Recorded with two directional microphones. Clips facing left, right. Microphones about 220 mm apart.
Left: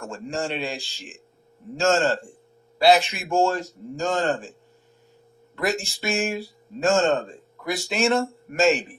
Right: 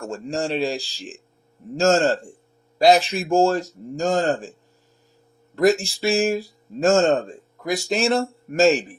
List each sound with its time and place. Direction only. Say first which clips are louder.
0.0 s speech: right 3 dB; 35° right (ahead or behind)
5.5 s speech: right 8 dB; 40° right (ahead or behind)